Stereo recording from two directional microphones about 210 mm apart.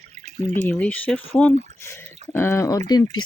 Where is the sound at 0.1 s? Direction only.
30° right (ahead or behind).